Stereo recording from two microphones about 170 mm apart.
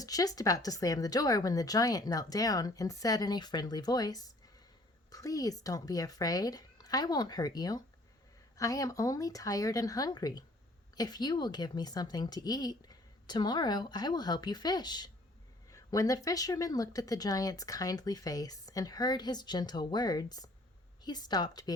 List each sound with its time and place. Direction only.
0.0 s speech: 20° left (ahead or behind)